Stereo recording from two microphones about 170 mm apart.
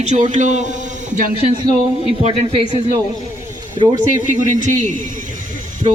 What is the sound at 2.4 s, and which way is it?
Speech, 35° right (ahead or behind).